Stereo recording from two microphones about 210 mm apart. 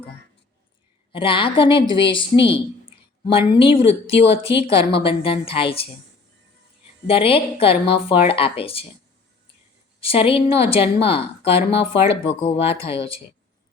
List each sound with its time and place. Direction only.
1.1 s a woman's voice: 25° left (ahead or behind)
7.1 s a woman's voice: 25° left (ahead or behind)
10.0 s a woman's voice: 25° left (ahead or behind)